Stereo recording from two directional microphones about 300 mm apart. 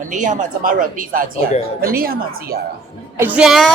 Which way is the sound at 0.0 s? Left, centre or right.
Right.